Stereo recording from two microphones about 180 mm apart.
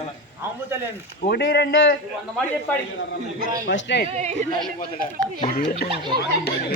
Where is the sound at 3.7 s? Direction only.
80° left.